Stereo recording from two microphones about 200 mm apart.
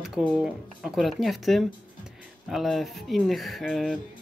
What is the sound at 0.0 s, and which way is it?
Speech, 5° right (ahead or behind).